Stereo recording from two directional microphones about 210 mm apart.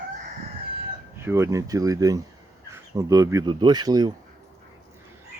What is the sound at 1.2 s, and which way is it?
Speech, 10° right (ahead or behind).